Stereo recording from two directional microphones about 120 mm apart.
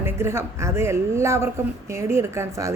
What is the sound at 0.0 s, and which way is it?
A woman's voice, 20° right (ahead or behind).